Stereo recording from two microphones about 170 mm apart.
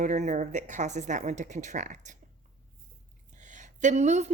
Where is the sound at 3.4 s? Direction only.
45° right (ahead or behind).